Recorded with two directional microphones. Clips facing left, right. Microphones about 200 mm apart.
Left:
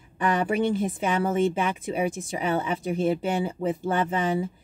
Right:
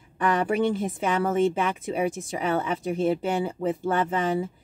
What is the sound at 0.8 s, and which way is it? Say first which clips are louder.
A woman's voice: even; 10° left (ahead or behind).